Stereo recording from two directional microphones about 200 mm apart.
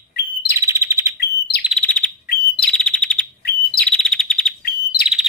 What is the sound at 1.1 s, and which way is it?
Bird, 55° left (ahead or behind).